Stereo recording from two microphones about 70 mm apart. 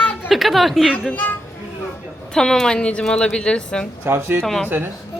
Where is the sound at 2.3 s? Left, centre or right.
Centre.